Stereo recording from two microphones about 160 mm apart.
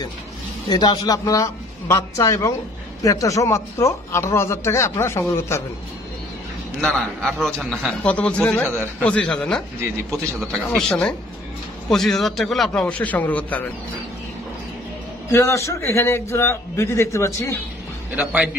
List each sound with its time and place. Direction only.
0.7 s a man's voice: 25° left (ahead or behind)
6.8 s a man's voice: 5° left (ahead or behind)
15.3 s speech: 20° left (ahead or behind)
18.1 s a man's voice: 10° right (ahead or behind)